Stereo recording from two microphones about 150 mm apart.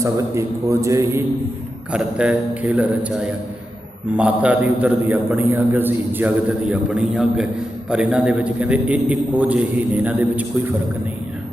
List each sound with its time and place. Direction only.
0.0 s a man's voice: 20° right (ahead or behind)
1.9 s a man's voice: 5° right (ahead or behind)